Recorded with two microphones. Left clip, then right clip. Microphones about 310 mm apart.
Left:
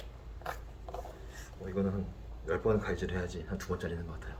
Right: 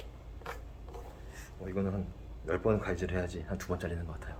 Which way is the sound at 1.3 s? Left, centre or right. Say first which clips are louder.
Left 1 dB; centre.